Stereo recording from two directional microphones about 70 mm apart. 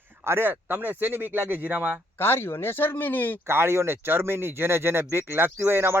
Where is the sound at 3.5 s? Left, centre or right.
Right.